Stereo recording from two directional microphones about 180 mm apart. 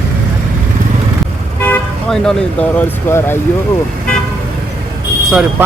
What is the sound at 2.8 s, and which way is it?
Speech, 10° left (ahead or behind).